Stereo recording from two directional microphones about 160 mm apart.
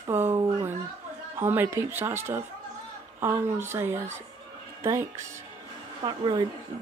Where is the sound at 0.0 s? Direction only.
15° right (ahead or behind).